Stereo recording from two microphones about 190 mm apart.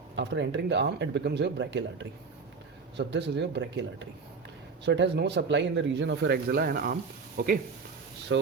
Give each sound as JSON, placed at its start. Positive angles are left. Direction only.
{"t": 0.2, "sound": "speech", "side_deg": -70}
{"t": 4.9, "sound": "speech", "side_deg": -65}
{"t": 8.3, "sound": "speech", "side_deg": -75}